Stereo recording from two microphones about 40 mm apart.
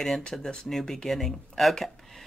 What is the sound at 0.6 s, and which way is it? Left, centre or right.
Speech, centre.